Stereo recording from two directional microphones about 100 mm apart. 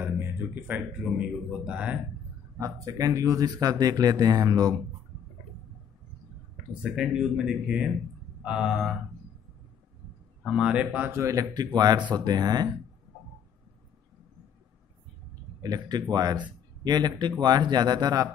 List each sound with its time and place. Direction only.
0.0 s a sound: 20° right (ahead or behind)
1.0 s speech: 5° right (ahead or behind)
2.5 s speech: 35° right (ahead or behind)
6.7 s speech: 10° right (ahead or behind)
10.4 s speech: 10° right (ahead or behind)
11.1 s a man's voice: 30° right (ahead or behind)
11.5 s speech: 45° right (ahead or behind)
15.6 s speech: 40° right (ahead or behind)